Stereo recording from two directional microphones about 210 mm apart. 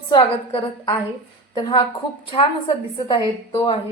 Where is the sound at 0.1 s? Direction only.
25° left (ahead or behind).